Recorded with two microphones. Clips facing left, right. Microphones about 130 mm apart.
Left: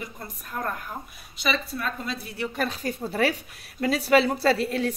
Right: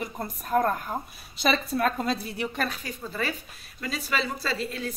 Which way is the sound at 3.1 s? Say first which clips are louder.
Left 7 dB; 75° left (ahead or behind).